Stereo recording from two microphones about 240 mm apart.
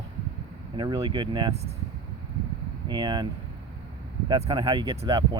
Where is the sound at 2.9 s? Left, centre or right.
Centre.